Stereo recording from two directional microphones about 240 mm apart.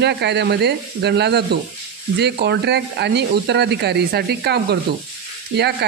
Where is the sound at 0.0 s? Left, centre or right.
Right.